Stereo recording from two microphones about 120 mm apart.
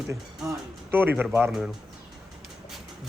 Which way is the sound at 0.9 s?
15° right (ahead or behind).